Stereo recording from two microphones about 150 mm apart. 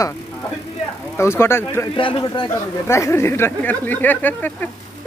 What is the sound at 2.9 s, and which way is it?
Speech, 20° left (ahead or behind).